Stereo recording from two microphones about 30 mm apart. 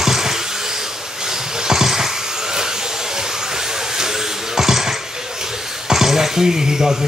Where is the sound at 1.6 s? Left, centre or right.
Centre.